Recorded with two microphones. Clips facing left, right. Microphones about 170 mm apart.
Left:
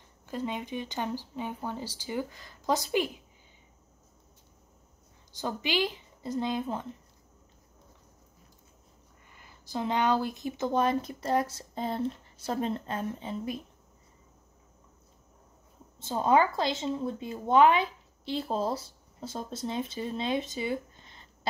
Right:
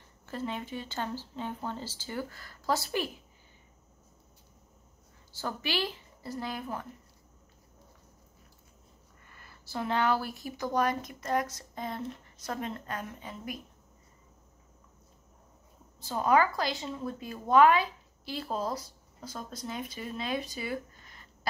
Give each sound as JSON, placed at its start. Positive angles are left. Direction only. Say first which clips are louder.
{"t": 0.3, "sound": "speech", "louder": "left 2 dB", "side_deg": 15}
{"t": 5.3, "sound": "speech", "louder": "left 3 dB", "side_deg": 15}
{"t": 9.3, "sound": "speech", "louder": "left 3 dB", "side_deg": 15}
{"t": 16.0, "sound": "speech", "louder": "left 1 dB", "side_deg": 25}